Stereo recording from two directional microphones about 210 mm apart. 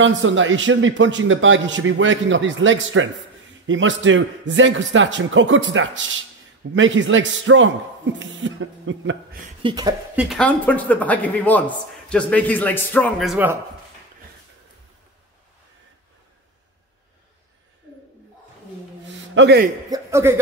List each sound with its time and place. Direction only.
0.0 s a man's voice: 65° right (ahead or behind)
9.6 s speech: 20° right (ahead or behind)
10.1 s a man's voice: 5° left (ahead or behind)
13.2 s speech: 5° right (ahead or behind)
19.3 s a man's voice: 55° right (ahead or behind)
19.9 s a sound: 15° right (ahead or behind)